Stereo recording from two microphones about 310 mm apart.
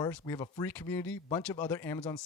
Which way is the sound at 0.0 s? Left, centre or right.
Centre.